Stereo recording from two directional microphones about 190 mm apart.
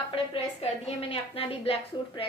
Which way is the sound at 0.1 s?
30° left (ahead or behind).